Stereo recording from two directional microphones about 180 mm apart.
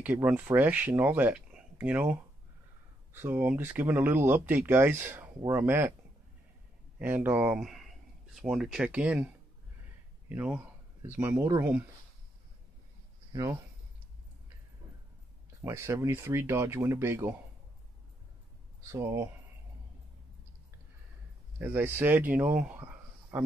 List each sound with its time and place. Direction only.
0.0 s speech: 10° right (ahead or behind)
7.0 s speech: 10° right (ahead or behind)
10.3 s speech: 10° right (ahead or behind)
13.3 s speech: 20° right (ahead or behind)
15.6 s speech: 15° right (ahead or behind)
18.9 s speech: 15° right (ahead or behind)
21.5 s speech: 10° right (ahead or behind)